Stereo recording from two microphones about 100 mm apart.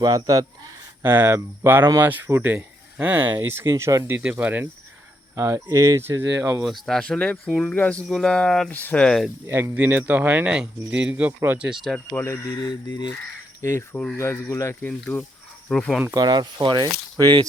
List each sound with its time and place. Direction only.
0.0 s speech: 40° right (ahead or behind)
1.0 s speech: 25° right (ahead or behind)
4.2 s speech: 15° right (ahead or behind)
5.3 s speech: 30° right (ahead or behind)
6.0 s speech: 25° right (ahead or behind)
6.7 s speech: centre (ahead or behind)
9.5 s speech: 30° right (ahead or behind); by 11.9 s 5° right (ahead or behind)
11.9 s speech: 20° left (ahead or behind); by 13.1 s 45° left (ahead or behind)
13.6 s speech: 30° left (ahead or behind)
14.3 s speech: 15° left (ahead or behind)
16.1 s speech: 45° right (ahead or behind)